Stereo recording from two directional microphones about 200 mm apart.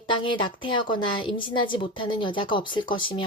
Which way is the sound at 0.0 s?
25° left (ahead or behind).